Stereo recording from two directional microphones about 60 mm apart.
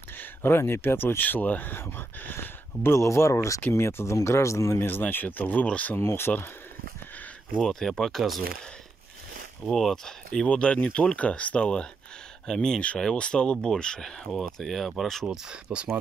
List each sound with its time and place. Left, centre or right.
0.2 s speech: left
3.6 s speech: left
4.8 s speech: left
5.9 s speech: left
7.6 s speech: centre
9.7 s speech: centre
10.5 s speech: left
12.8 s speech: centre
15.2 s speech: centre